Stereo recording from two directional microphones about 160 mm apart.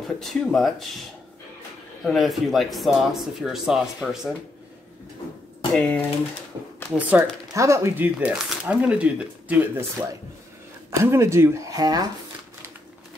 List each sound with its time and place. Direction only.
0.2 s speech: centre (ahead or behind)
2.0 s speech: centre (ahead or behind)
5.7 s speech: 10° left (ahead or behind)
7.0 s speech: 10° right (ahead or behind)
11.1 s speech: 15° right (ahead or behind)